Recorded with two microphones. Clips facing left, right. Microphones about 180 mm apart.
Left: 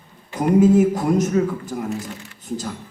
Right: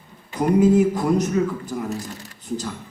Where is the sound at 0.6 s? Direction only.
45° left (ahead or behind).